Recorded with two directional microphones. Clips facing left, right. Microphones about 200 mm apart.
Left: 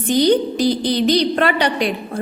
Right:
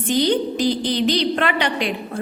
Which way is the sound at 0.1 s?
40° left (ahead or behind).